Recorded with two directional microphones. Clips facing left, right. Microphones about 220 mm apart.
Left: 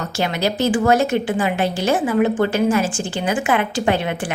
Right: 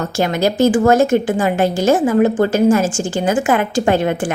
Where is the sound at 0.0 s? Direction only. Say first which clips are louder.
Right 5 dB; 50° right (ahead or behind).